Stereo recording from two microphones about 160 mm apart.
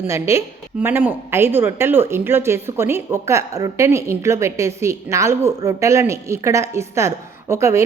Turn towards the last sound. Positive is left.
turn(degrees=-20)  # may be behind; listen again after turning